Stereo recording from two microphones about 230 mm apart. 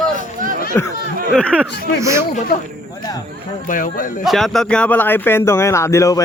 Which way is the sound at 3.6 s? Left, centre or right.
Left.